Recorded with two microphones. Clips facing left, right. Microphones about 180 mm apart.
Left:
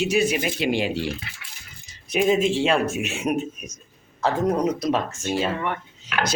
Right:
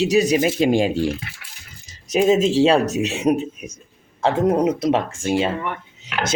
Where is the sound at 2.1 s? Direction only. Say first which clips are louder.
Right 4 dB; 35° right (ahead or behind).